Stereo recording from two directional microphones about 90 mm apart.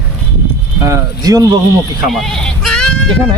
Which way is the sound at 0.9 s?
40° right (ahead or behind).